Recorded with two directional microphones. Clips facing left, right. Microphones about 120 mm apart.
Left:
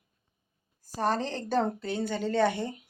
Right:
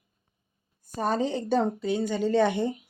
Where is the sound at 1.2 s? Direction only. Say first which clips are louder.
Right 3 dB; 5° right (ahead or behind).